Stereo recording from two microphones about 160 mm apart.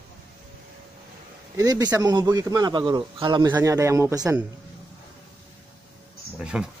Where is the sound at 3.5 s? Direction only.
20° right (ahead or behind).